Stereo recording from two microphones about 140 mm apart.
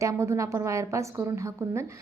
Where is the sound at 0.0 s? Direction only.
20° right (ahead or behind).